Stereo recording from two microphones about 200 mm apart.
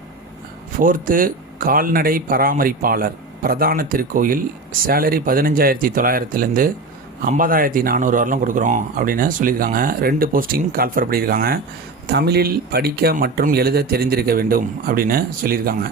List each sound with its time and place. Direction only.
0.8 s a man's voice: 40° right (ahead or behind)